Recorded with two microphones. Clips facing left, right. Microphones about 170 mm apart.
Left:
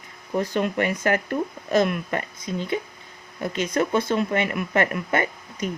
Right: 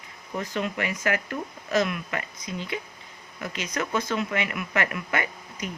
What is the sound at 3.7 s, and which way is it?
Speech, 30° left (ahead or behind).